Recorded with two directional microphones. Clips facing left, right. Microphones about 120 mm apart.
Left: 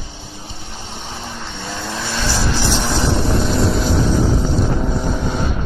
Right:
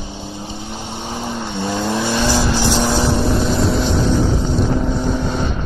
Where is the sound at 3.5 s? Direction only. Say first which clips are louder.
Right 1 dB; centre (ahead or behind).